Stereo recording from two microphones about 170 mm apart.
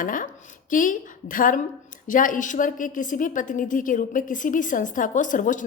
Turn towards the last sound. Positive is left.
turn(degrees=50)  # may be behind; listen again after turning